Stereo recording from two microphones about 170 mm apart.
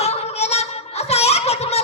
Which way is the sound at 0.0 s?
40° left (ahead or behind).